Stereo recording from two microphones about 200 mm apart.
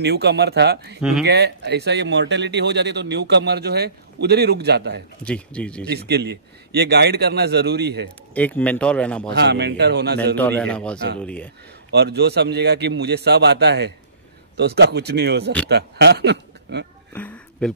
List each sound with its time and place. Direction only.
0.0 s speech: 55° right (ahead or behind)
5.2 s a man's voice: 5° left (ahead or behind)
5.9 s speech: 55° right (ahead or behind)
8.4 s speech: 10° left (ahead or behind)
9.3 s speech: 55° right (ahead or behind)
10.3 s a man's voice: 10° left (ahead or behind)
11.9 s speech: 55° right (ahead or behind)
17.1 s a sound: 5° left (ahead or behind)